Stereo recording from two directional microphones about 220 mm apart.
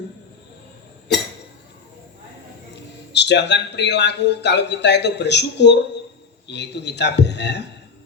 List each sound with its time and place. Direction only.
3.1 s a man's voice: 50° left (ahead or behind)